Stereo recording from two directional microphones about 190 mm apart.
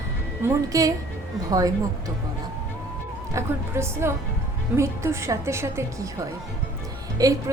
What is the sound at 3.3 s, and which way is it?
A woman's voice, 15° right (ahead or behind).